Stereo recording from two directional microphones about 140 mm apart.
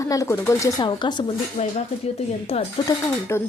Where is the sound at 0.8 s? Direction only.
35° left (ahead or behind).